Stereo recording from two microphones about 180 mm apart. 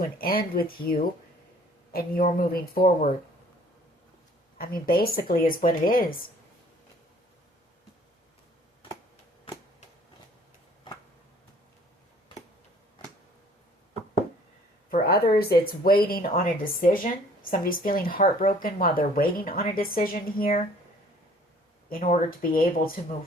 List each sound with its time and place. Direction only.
0.0 s speech: 55° left (ahead or behind)
4.5 s speech: 55° left (ahead or behind)
14.8 s speech: 55° left (ahead or behind)
22.0 s speech: 45° left (ahead or behind)